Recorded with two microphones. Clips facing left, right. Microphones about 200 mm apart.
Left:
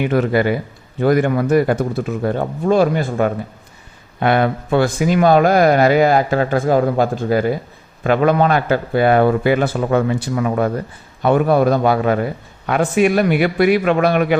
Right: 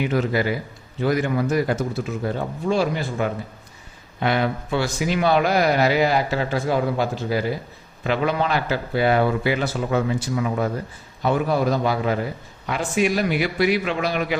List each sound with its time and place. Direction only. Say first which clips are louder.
0.0 s a man's voice: left 5 dB; 55° left (ahead or behind)